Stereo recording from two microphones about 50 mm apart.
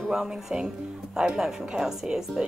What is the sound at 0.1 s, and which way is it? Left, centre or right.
A woman's voice, centre.